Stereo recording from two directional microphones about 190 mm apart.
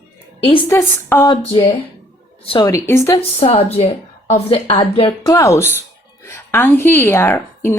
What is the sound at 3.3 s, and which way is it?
A woman's voice, 30° left (ahead or behind).